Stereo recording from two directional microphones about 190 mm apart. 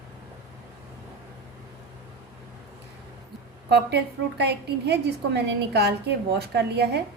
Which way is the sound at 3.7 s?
60° right (ahead or behind).